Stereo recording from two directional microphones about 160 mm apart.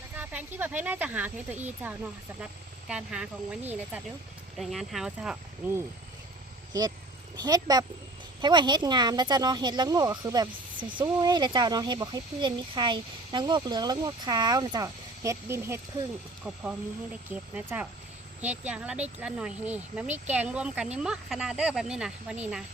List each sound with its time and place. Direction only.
0.2 s speech: 10° right (ahead or behind)
7.3 s speech: 25° right (ahead or behind); by 22.4 s 5° right (ahead or behind)